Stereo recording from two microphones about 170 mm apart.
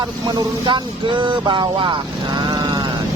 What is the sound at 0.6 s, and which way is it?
Speech, 30° right (ahead or behind).